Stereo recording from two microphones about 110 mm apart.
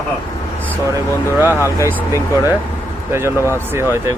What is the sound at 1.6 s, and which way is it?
Speech, 25° left (ahead or behind).